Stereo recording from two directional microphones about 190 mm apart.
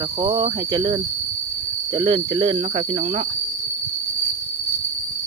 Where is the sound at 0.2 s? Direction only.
25° right (ahead or behind).